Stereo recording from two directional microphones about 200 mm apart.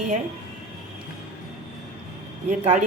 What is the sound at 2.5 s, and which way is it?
Speech, 35° right (ahead or behind).